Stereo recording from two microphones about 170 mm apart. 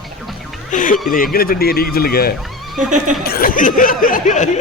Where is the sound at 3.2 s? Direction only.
60° left (ahead or behind).